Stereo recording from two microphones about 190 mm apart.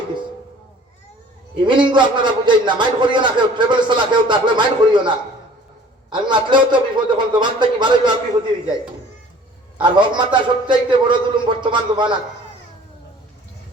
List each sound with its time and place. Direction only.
1.6 s a man's voice: 25° right (ahead or behind)
9.8 s a man's voice: 25° right (ahead or behind)